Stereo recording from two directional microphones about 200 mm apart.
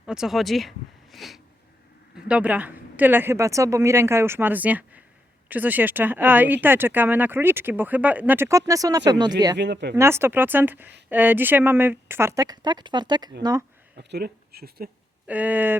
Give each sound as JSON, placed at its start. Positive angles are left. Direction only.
{"t": 0.0, "sound": "speech", "side_deg": -5}
{"t": 1.1, "sound": "a sound", "side_deg": 0}
{"t": 2.1, "sound": "speech", "side_deg": -5}
{"t": 9.6, "sound": "speech", "side_deg": -60}
{"t": 9.9, "sound": "speech", "side_deg": -10}
{"t": 13.9, "sound": "speech", "side_deg": -55}
{"t": 15.3, "sound": "speech", "side_deg": -10}